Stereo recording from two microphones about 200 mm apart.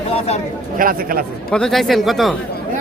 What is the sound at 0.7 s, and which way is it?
Speech, 45° right (ahead or behind).